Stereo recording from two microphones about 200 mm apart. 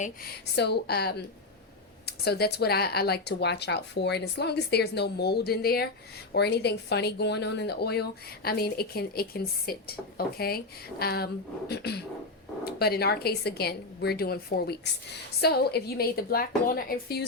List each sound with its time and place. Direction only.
0.0 s speech: 50° left (ahead or behind)